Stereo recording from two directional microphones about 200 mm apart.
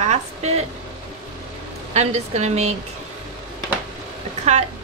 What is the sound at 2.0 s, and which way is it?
Speech, 35° right (ahead or behind).